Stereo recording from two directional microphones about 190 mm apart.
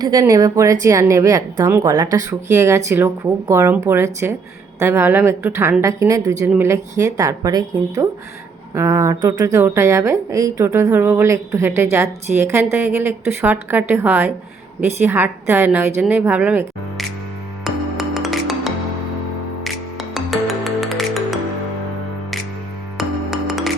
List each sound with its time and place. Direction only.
0.0 s a woman's voice: 20° right (ahead or behind)
17.6 s music: centre (ahead or behind)
23.0 s music: centre (ahead or behind)